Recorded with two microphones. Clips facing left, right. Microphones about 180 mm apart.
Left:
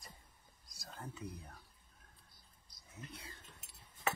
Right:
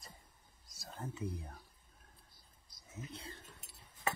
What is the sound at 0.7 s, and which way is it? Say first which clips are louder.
Speech: right 4 dB; 25° right (ahead or behind).